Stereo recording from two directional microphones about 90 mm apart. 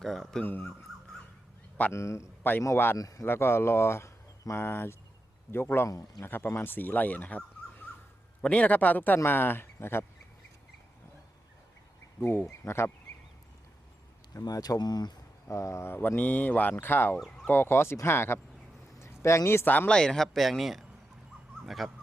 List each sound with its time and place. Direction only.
0.0 s a sound: 5° left (ahead or behind)
0.4 s speech: 20° left (ahead or behind)
1.9 s speech: 30° left (ahead or behind)
3.0 s speech: 40° left (ahead or behind)
3.2 s speech: 25° left (ahead or behind)
5.9 s speech: 40° left (ahead or behind)
6.2 s speech: 25° left (ahead or behind)
12.2 s speech: 25° left (ahead or behind)
14.3 s speech: 45° left (ahead or behind)
15.4 s speech: 35° left (ahead or behind)
17.2 s speech: 5° left (ahead or behind)
17.5 s speech: 25° left (ahead or behind)
19.9 s speech: 10° left (ahead or behind)